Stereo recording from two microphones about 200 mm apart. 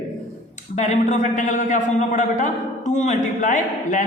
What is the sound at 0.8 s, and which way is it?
A man's voice, 35° left (ahead or behind).